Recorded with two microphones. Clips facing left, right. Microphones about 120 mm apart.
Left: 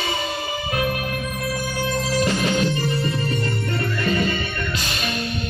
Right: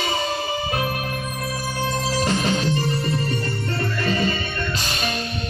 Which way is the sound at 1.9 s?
35° right (ahead or behind).